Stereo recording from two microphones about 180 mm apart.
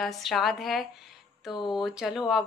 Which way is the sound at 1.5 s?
25° left (ahead or behind).